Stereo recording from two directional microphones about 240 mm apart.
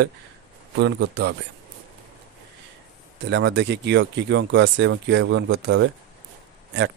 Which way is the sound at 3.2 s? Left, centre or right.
Right.